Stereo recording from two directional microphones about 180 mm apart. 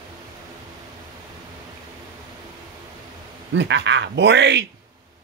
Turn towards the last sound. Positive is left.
turn(degrees=-70)  # may be behind; listen again after turning